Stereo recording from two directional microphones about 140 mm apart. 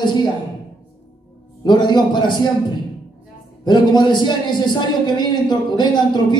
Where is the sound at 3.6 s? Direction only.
30° left (ahead or behind).